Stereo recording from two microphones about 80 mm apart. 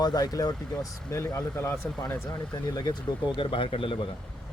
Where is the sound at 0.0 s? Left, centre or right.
Left.